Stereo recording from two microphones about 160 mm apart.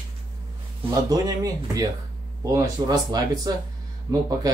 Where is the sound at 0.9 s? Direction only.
20° right (ahead or behind).